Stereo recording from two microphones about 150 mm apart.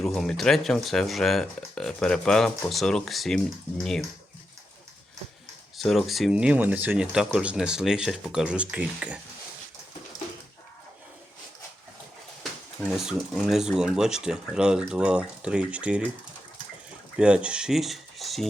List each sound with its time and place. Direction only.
0.0 s speech: centre (ahead or behind)
5.7 s speech: centre (ahead or behind)
12.4 s speech: centre (ahead or behind)
17.2 s speech: 5° right (ahead or behind)